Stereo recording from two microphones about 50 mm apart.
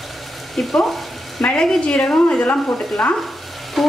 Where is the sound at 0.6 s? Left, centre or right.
Centre.